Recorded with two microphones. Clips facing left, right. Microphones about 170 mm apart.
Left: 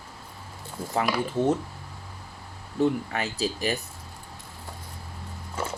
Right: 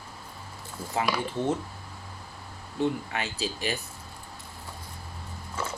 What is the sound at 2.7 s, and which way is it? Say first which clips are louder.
Speech: left 4 dB; 40° left (ahead or behind).